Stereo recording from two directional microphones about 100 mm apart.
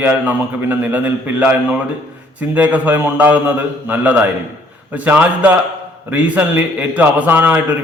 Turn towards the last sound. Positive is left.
turn(degrees=-15)  # may be behind; listen again after turning